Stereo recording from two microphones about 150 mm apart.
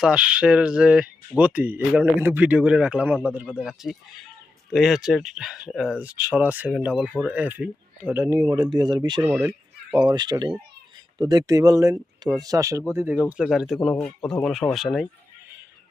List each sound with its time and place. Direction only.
0.0 s speech: 5° right (ahead or behind); by 9.2 s 30° right (ahead or behind)
9.2 s speech: 15° right (ahead or behind)
9.9 s speech: 30° right (ahead or behind)
13.1 s speech: 5° right (ahead or behind)
13.7 s speech: 10° left (ahead or behind)